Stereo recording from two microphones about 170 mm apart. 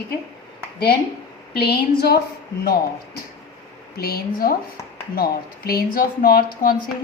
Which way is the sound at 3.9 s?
65° left (ahead or behind).